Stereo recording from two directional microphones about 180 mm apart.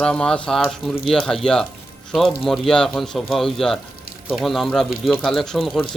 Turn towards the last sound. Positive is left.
turn(degrees=0)  # may be behind; listen again after turning